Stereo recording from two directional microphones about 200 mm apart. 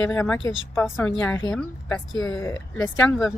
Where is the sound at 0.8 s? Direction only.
10° left (ahead or behind).